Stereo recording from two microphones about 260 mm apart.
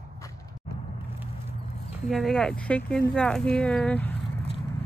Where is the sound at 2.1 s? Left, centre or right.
Centre.